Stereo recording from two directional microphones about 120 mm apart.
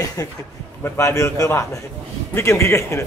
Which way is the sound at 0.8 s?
25° left (ahead or behind).